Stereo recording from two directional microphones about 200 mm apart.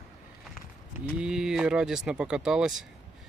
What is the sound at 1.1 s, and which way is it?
Speech, 5° right (ahead or behind).